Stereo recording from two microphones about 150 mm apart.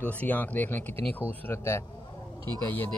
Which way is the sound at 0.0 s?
10° left (ahead or behind).